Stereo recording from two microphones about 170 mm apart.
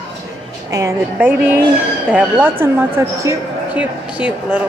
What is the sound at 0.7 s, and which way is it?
A woman's voice, 20° right (ahead or behind).